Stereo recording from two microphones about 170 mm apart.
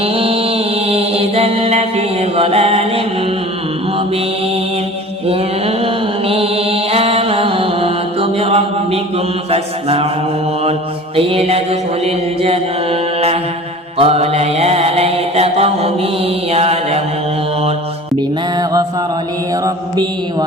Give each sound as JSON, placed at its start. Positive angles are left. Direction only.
{"t": 0.0, "sound": "mantra", "side_deg": -35}
{"t": 5.3, "sound": "mantra", "side_deg": -35}
{"t": 11.2, "sound": "mantra", "side_deg": -35}
{"t": 18.2, "sound": "music", "side_deg": -25}